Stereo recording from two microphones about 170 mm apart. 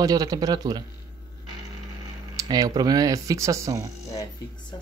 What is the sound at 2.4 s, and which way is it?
Speech, 25° right (ahead or behind).